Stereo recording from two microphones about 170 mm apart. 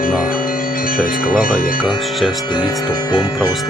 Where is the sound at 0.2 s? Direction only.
55° left (ahead or behind).